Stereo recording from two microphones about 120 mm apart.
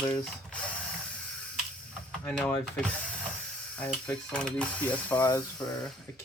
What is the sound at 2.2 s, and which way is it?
Speech, 10° left (ahead or behind).